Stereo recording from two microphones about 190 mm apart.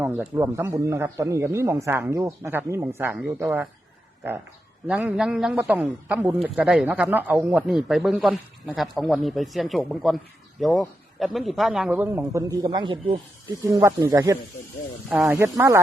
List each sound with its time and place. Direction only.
0.3 s a man's voice: 15° right (ahead or behind)
4.9 s a man's voice: 5° right (ahead or behind)